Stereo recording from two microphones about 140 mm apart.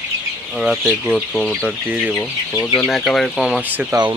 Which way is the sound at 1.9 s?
10° right (ahead or behind).